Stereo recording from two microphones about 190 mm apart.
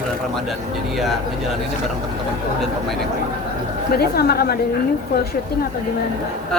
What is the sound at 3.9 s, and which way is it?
Speech, 55° left (ahead or behind).